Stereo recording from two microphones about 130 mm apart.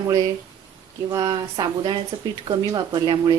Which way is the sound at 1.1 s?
30° right (ahead or behind).